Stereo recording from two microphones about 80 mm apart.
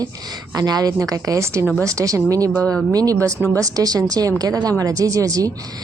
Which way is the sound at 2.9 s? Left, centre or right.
Right.